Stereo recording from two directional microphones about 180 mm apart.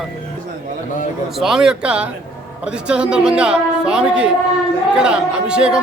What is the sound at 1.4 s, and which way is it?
Speech, centre (ahead or behind).